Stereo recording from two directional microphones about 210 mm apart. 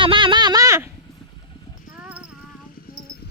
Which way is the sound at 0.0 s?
25° right (ahead or behind).